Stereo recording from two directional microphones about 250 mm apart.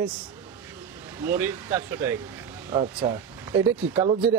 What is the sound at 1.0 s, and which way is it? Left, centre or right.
Speech, centre.